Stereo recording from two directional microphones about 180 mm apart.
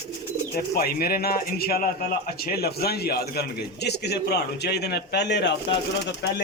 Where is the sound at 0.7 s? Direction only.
55° left (ahead or behind).